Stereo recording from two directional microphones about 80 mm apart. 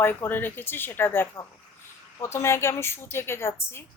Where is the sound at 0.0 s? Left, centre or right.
Left.